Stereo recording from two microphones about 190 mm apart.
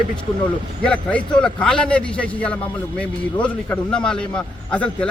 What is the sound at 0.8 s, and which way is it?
A man's voice, 5° left (ahead or behind).